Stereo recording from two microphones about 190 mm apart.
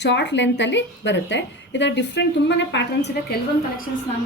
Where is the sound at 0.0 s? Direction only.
65° left (ahead or behind).